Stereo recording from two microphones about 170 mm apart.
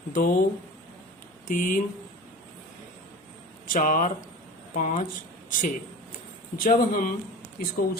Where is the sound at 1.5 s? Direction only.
50° left (ahead or behind).